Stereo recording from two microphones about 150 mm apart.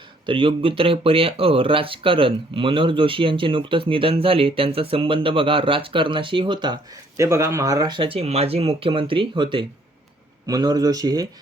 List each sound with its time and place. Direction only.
0.3 s speech: 35° right (ahead or behind)
7.2 s speech: 20° right (ahead or behind)